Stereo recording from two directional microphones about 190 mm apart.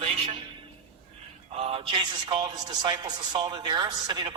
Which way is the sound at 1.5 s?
30° right (ahead or behind).